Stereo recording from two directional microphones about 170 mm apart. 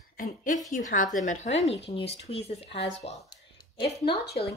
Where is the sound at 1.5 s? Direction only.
90° left.